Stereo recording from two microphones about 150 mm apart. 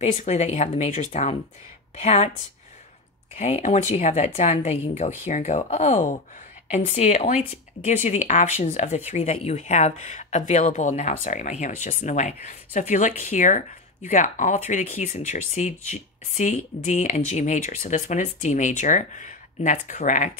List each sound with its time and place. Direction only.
0.0 s speech: 50° left (ahead or behind)
3.3 s speech: 50° left (ahead or behind)